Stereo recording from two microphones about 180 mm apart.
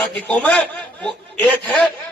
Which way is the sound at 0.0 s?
10° left (ahead or behind).